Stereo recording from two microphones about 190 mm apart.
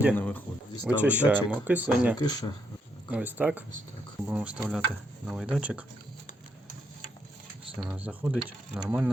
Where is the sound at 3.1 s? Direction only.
10° right (ahead or behind).